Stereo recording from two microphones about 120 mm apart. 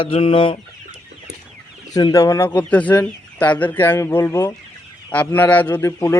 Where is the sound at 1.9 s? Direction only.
30° left (ahead or behind).